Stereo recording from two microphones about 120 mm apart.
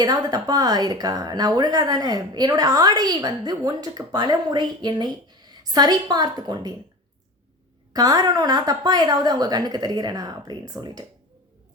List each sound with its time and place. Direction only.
0.0 s speech: 30° right (ahead or behind)
7.9 s speech: 30° right (ahead or behind)